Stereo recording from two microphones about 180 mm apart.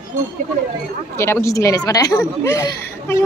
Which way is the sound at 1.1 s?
15° left (ahead or behind).